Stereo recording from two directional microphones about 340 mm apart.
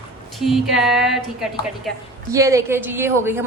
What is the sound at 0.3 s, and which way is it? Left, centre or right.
A woman's voice, centre.